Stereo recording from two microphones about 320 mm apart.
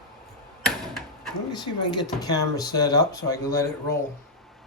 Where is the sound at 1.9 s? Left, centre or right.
Centre.